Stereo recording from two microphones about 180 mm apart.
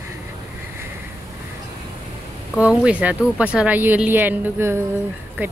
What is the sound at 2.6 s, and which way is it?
Speech, 5° right (ahead or behind).